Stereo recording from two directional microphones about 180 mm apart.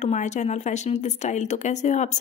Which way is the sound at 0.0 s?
40° left (ahead or behind).